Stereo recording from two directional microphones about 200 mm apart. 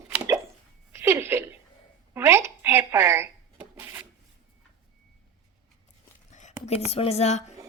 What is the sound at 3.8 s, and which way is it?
Rub, 15° right (ahead or behind).